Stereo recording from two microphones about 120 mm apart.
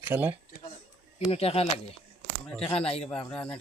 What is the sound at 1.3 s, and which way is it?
Speech, 55° left (ahead or behind).